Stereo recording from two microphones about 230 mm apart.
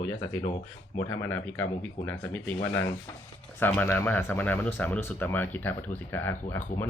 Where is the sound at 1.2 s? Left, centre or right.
Centre.